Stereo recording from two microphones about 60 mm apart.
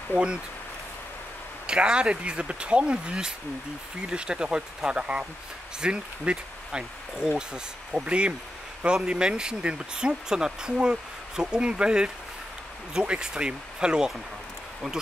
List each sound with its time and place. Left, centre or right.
0.1 s speech: centre
1.7 s speech: centre